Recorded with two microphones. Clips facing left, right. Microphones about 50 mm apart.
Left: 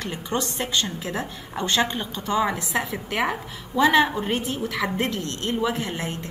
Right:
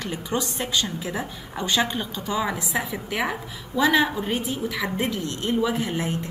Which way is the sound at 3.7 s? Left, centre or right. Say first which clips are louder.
Left 2 dB; left.